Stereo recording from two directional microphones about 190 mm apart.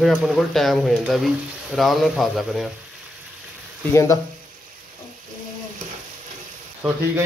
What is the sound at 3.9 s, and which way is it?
Speech, 15° left (ahead or behind).